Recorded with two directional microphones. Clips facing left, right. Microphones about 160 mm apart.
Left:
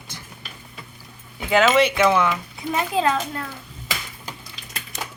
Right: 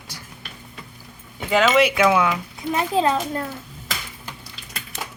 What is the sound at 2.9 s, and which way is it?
Speech, 30° right (ahead or behind).